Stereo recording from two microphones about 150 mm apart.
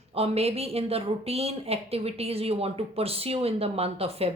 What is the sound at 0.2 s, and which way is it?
A woman's voice, 40° right (ahead or behind).